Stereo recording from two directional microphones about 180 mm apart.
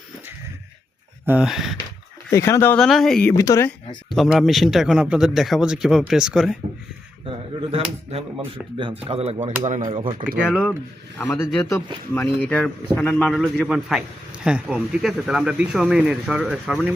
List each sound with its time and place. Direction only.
1.2 s speech: 10° right (ahead or behind)
2.3 s speech: 15° left (ahead or behind)
3.3 s speech: 20° left (ahead or behind)
3.7 s speech: centre (ahead or behind)
8.5 s speech: 30° right (ahead or behind)
9.9 s speech: 30° right (ahead or behind)
10.4 s speech: 5° left (ahead or behind)